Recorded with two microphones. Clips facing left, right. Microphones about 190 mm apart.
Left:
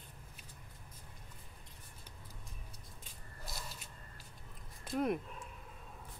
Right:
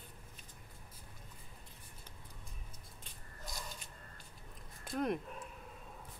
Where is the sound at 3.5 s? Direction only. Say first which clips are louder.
Right 1 dB; 5° left (ahead or behind).